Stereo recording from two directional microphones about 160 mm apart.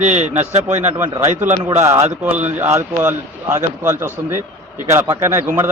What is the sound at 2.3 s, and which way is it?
Speech, 10° right (ahead or behind).